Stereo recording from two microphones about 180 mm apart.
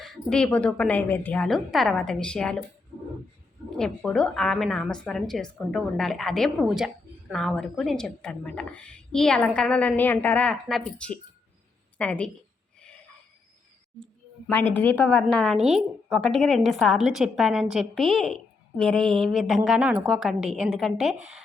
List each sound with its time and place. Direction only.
0.0 s a woman's voice: centre (ahead or behind)
3.8 s a woman's voice: 5° left (ahead or behind)
14.0 s a woman's voice: 5° left (ahead or behind)